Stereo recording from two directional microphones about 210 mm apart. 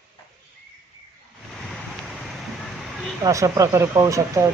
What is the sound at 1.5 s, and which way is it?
Vehicle, centre (ahead or behind).